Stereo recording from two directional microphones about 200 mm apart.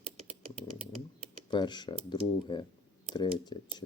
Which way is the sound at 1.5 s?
20° left (ahead or behind).